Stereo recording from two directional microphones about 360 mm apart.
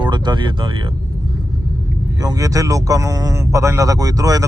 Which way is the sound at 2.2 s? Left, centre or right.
Centre.